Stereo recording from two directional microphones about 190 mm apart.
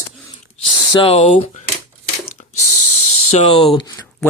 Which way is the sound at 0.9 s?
30° left (ahead or behind).